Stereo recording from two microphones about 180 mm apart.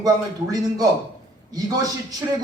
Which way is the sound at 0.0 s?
20° right (ahead or behind).